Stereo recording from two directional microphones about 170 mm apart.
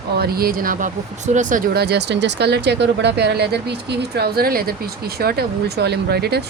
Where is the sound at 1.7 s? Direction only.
75° right (ahead or behind).